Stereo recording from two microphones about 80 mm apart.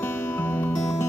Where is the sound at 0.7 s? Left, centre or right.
Left.